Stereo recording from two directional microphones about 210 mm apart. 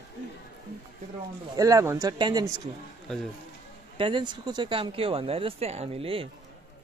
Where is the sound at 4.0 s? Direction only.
25° right (ahead or behind).